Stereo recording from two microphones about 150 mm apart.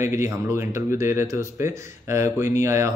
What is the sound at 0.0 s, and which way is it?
Speech, 20° right (ahead or behind).